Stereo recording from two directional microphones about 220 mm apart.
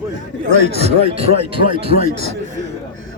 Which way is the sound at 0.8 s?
25° right (ahead or behind).